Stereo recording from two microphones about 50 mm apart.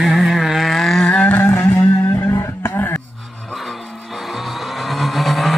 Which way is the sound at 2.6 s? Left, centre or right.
Left.